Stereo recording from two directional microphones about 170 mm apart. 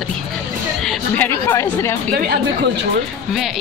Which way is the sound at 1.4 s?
15° left (ahead or behind).